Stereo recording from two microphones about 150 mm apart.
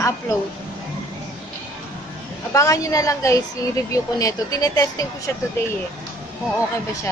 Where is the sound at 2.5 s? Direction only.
20° left (ahead or behind).